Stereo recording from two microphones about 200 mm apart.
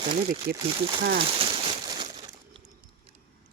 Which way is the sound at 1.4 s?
25° right (ahead or behind).